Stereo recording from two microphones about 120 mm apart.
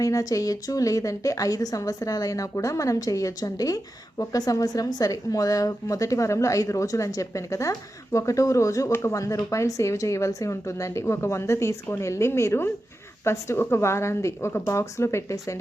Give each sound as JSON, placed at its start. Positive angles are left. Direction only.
{"t": 0.0, "sound": "speech", "side_deg": 30}